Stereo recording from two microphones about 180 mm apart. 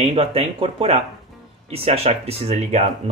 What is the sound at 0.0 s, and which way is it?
Speech, 30° right (ahead or behind).